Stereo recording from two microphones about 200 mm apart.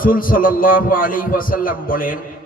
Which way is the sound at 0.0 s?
45° left (ahead or behind).